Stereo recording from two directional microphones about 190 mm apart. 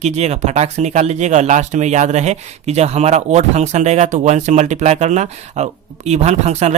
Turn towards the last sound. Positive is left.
turn(degrees=-35)  # may be behind; listen again after turning